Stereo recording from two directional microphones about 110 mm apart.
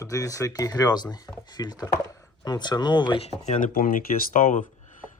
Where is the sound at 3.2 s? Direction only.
90° left.